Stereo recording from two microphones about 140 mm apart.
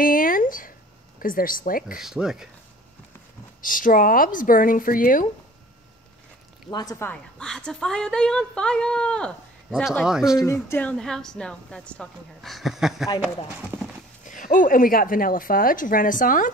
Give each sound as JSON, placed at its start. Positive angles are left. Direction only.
{"t": 0.0, "sound": "a sound", "side_deg": 85}
{"t": 1.2, "sound": "a woman's voice", "side_deg": 85}
{"t": 2.0, "sound": "a woman's voice", "side_deg": -5}
{"t": 3.6, "sound": "speech", "side_deg": 75}
{"t": 6.7, "sound": "speech", "side_deg": 30}
{"t": 7.0, "sound": "a woman's voice", "side_deg": 10}
{"t": 10.0, "sound": "a woman's voice", "side_deg": -5}
{"t": 10.4, "sound": "a woman's voice", "side_deg": 20}
{"t": 14.2, "sound": "a woman's voice", "side_deg": 70}